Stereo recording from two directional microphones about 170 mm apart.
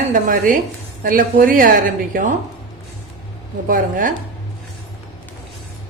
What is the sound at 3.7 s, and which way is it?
Speech, 50° right (ahead or behind).